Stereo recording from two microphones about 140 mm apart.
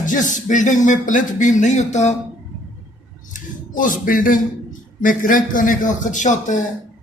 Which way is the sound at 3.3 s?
70° left (ahead or behind).